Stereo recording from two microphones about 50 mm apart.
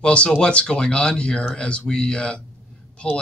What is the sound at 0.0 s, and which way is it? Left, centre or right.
Speech, left.